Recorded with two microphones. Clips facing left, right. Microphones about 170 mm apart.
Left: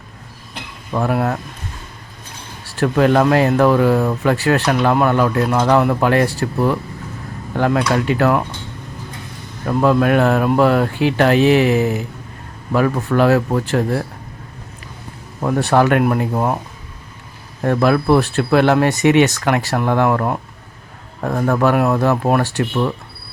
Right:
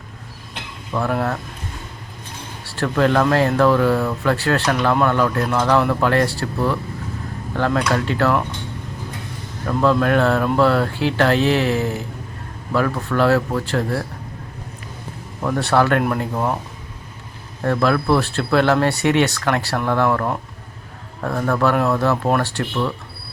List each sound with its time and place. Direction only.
0.9 s speech: 15° left (ahead or behind)
2.7 s speech: 15° left (ahead or behind)
9.6 s speech: 15° left (ahead or behind)
15.4 s speech: 15° left (ahead or behind)
17.6 s speech: 15° left (ahead or behind)